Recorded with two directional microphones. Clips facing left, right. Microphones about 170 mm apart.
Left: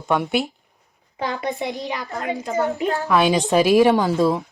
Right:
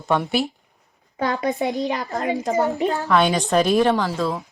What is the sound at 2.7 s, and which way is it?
A child's voice, centre (ahead or behind).